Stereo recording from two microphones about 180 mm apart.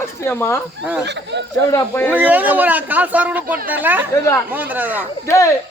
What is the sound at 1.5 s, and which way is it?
Speech, 15° left (ahead or behind).